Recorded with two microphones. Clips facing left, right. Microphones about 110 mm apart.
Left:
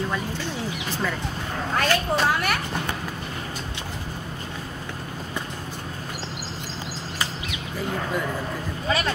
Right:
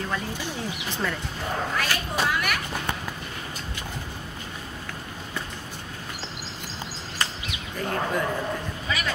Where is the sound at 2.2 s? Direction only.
35° left (ahead or behind).